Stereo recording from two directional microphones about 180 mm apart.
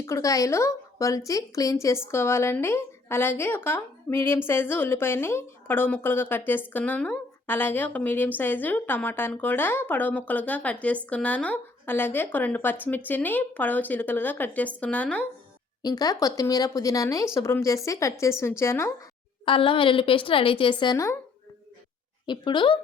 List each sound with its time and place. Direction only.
0.0 s a woman's voice: 20° left (ahead or behind)
15.8 s a woman's voice: 20° left (ahead or behind)
19.5 s a woman's voice: 30° left (ahead or behind)
22.3 s a woman's voice: 25° left (ahead or behind)